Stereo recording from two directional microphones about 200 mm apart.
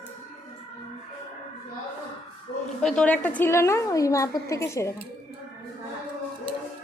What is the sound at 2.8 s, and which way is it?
A woman's voice, 5° left (ahead or behind).